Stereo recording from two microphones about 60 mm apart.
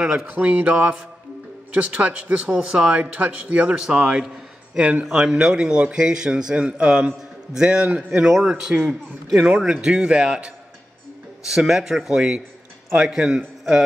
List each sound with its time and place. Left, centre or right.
0.0 s a man's voice: centre
0.3 s a man's voice: right
5.0 s a man's voice: centre
8.3 s a man's voice: centre